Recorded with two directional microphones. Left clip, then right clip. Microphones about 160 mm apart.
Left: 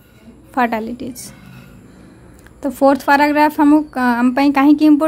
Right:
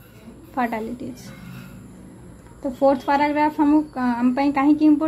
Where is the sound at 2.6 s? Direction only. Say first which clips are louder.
Left 5 dB; 50° left (ahead or behind).